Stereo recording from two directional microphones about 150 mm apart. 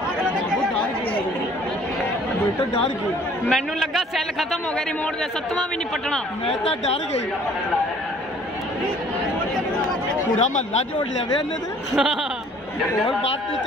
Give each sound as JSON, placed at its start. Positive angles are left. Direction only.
{"t": 3.4, "sound": "a man's voice", "side_deg": 0}
{"t": 6.4, "sound": "speech", "side_deg": 45}
{"t": 10.4, "sound": "speech", "side_deg": 50}
{"t": 11.9, "sound": "a man's voice", "side_deg": -5}